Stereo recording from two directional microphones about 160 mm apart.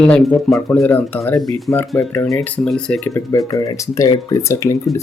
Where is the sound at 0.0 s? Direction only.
5° left (ahead or behind).